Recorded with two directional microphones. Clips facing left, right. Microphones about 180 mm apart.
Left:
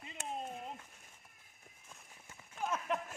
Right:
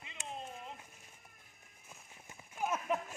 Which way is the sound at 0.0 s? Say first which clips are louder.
Left 3 dB; 45° left (ahead or behind).